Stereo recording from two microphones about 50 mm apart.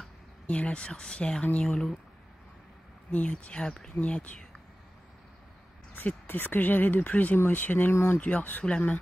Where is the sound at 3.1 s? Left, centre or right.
Left.